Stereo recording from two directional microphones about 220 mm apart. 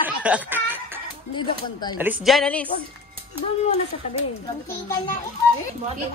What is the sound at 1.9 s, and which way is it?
Speech, 5° right (ahead or behind).